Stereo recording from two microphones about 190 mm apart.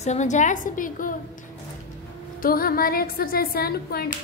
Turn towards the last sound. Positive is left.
turn(degrees=55)  # may be behind; listen again after turning